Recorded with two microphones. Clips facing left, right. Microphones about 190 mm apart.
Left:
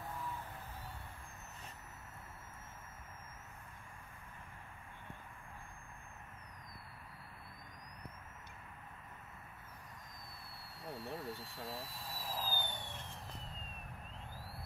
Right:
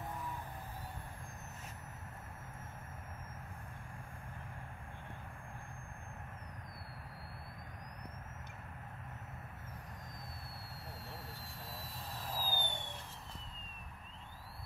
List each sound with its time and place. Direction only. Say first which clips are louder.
11.1 s jet engine: left 6 dB; 25° left (ahead or behind)
11.7 s jet engine: left 1 dB; centre (ahead or behind)
12.5 s vehicle: right 2 dB; 25° right (ahead or behind)